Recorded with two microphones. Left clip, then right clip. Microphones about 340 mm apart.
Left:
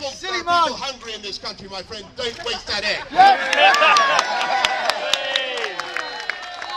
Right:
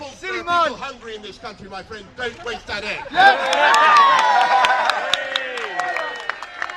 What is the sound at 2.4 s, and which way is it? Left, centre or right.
Speech, centre.